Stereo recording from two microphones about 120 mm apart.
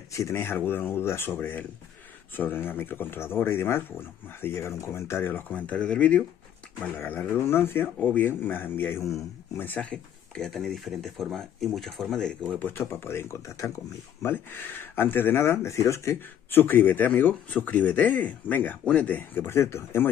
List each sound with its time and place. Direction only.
0.1 s speech: 20° left (ahead or behind); by 12.4 s 5° left (ahead or behind)
12.5 s speech: 15° left (ahead or behind)